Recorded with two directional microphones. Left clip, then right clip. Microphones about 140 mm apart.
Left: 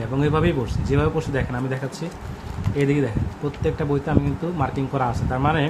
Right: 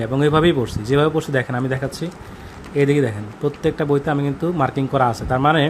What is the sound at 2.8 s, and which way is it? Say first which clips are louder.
A man's voice: right 5 dB; 50° right (ahead or behind).